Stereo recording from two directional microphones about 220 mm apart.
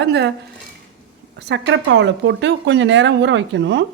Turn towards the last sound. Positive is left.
turn(degrees=-55)  # may be behind; listen again after turning